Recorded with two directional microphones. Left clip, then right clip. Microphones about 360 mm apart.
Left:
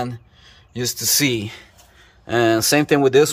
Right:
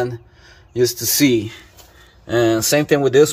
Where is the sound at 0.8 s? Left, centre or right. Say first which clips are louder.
Right 4 dB; centre.